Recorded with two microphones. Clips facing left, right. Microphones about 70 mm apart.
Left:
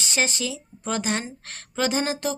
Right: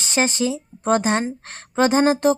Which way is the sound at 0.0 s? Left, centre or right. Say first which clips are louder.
Right 5 dB; right.